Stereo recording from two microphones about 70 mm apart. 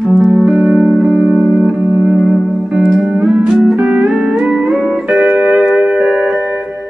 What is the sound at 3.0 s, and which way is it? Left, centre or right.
Music, centre.